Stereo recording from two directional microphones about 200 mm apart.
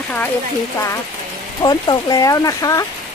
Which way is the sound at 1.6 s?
20° left (ahead or behind).